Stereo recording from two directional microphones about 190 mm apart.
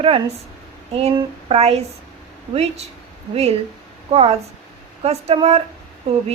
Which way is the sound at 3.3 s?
30° right (ahead or behind).